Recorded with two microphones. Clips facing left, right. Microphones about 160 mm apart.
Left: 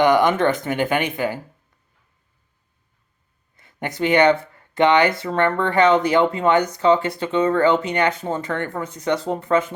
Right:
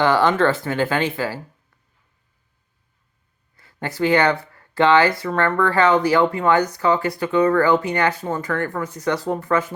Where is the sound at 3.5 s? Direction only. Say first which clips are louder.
Even; 20° left (ahead or behind).